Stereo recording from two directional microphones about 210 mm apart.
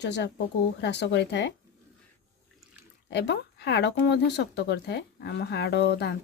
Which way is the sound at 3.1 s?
55° left (ahead or behind).